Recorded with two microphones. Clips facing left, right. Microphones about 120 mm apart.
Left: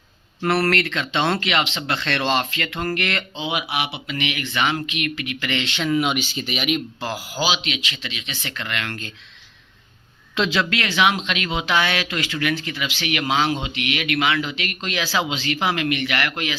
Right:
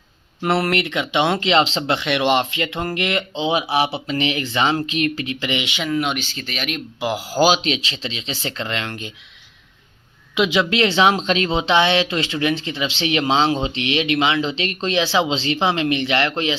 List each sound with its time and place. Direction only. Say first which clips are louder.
0.4 s speech: right 1 dB; 20° right (ahead or behind)
2.0 s speech: right 3 dB; 15° right (ahead or behind)
5.9 s speech: left 1 dB; 5° left (ahead or behind)
7.0 s speech: right 5 dB; 20° right (ahead or behind)
7.3 s speech: right 8 dB; 45° right (ahead or behind); by 9.1 s 20° right (ahead or behind)
10.3 s speech: right 4 dB; 15° right (ahead or behind)